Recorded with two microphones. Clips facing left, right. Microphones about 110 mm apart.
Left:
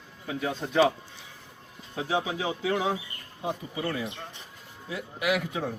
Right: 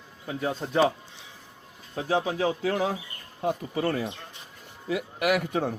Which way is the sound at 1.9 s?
40° right (ahead or behind).